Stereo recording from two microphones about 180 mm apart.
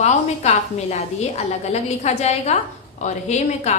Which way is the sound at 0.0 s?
40° left (ahead or behind).